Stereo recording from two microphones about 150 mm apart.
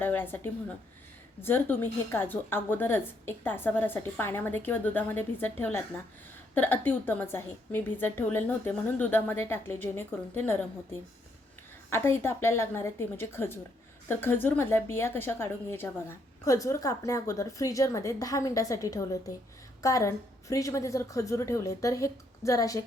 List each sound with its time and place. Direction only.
0.0 s a woman's voice: 15° left (ahead or behind)
11.9 s a woman's voice: 15° left (ahead or behind)